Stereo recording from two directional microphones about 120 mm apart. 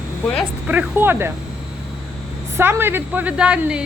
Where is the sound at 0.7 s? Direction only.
15° right (ahead or behind).